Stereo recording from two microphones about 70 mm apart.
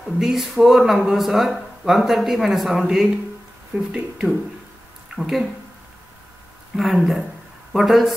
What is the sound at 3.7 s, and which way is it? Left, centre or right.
Speech, centre.